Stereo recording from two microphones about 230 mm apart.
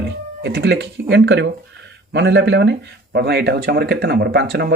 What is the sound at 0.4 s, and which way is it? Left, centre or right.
Speech, right.